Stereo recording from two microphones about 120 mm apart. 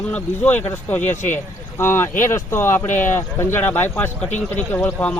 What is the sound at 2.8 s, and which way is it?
Speech, 90° left.